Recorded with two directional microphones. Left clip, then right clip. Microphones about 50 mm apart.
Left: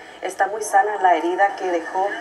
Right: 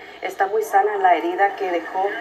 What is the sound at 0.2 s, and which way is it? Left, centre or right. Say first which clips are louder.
A woman's voice: right 1 dB; centre.